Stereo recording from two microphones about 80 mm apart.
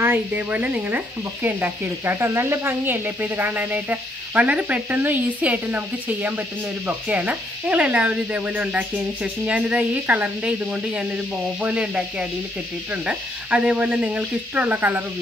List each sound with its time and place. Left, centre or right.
0.0 s sizzle: right
6.9 s speech: centre